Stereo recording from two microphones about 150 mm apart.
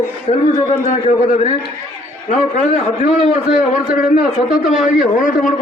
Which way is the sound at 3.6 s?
60° left (ahead or behind).